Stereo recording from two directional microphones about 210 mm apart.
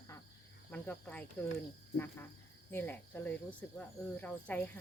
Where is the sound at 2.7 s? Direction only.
10° left (ahead or behind).